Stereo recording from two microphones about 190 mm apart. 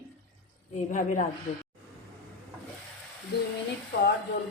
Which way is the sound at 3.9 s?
50° left (ahead or behind).